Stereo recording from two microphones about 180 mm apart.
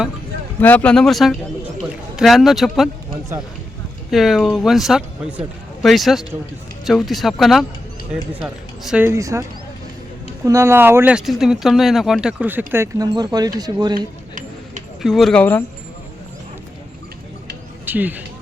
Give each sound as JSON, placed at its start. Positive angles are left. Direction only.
{"t": 0.6, "sound": "a man's voice", "side_deg": 10}
{"t": 4.1, "sound": "a man's voice", "side_deg": 0}
{"t": 9.0, "sound": "speech", "side_deg": -15}
{"t": 10.4, "sound": "speech", "side_deg": -15}
{"t": 13.9, "sound": "a sound", "side_deg": -45}
{"t": 15.0, "sound": "a man's voice", "side_deg": 0}
{"t": 17.8, "sound": "speech", "side_deg": -10}